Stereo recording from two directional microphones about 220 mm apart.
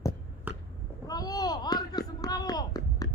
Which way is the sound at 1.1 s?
15° left (ahead or behind).